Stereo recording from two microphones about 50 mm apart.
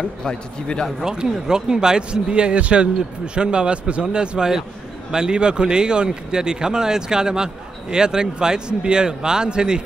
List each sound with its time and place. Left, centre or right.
0.2 s speech: centre
1.0 s a man's voice: centre